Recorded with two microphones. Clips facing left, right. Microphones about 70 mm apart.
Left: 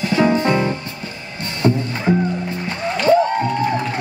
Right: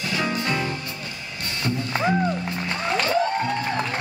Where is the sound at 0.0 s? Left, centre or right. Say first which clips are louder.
Left 9 dB; left.